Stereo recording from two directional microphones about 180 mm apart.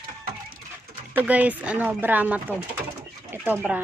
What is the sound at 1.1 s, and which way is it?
Speech, 10° right (ahead or behind).